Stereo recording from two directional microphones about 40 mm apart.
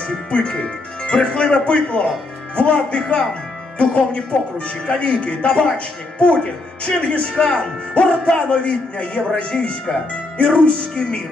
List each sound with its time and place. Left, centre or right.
0.3 s speech: left